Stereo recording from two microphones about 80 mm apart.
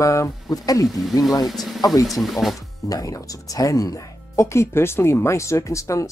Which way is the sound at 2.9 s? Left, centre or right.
Left.